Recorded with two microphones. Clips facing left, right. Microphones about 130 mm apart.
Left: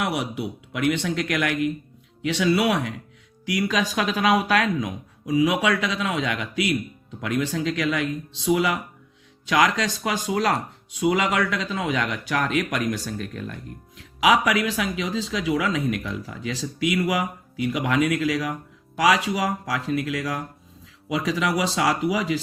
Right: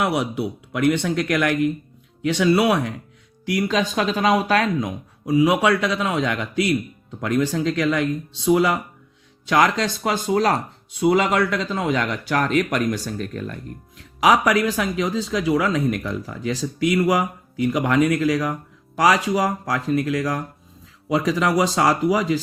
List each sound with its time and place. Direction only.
0.0 s speech: 60° right (ahead or behind)
0.7 s speech: 40° right (ahead or behind)
3.4 s speech: 30° right (ahead or behind)